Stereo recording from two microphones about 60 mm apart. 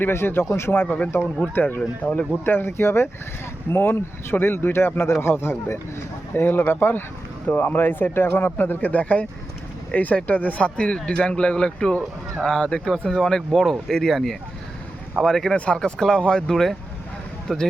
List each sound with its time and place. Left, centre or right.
0.0 s speech: left
1.8 s speech: centre
2.4 s speech: left; by 15.5 s centre
15.5 s speech: left
15.8 s speech: centre